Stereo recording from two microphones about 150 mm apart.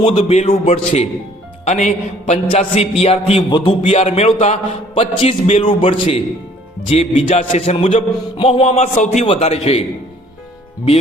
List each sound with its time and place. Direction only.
0.2 s a man's voice: 45° left (ahead or behind)
9.2 s a man's voice: 40° left (ahead or behind)